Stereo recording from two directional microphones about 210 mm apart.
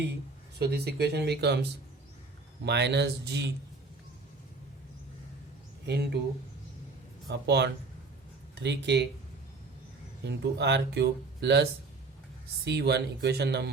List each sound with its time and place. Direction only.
0.6 s speech: 50° right (ahead or behind)
2.6 s speech: 55° right (ahead or behind)
5.8 s speech: 50° right (ahead or behind)
7.3 s speech: 55° right (ahead or behind)
10.2 s speech: 55° right (ahead or behind)